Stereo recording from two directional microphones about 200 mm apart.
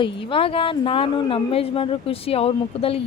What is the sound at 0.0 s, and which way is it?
Speech, 25° left (ahead or behind).